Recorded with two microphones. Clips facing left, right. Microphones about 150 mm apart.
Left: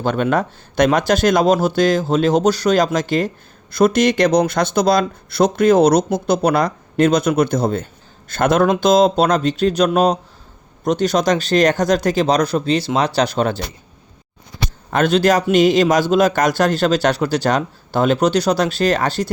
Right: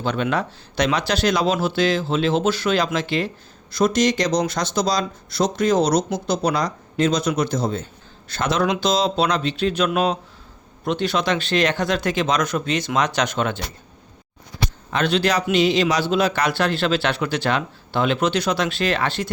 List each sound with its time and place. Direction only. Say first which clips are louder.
0.0 s speech: left 5 dB; 45° left (ahead or behind)
14.8 s speech: left 6 dB; 45° left (ahead or behind)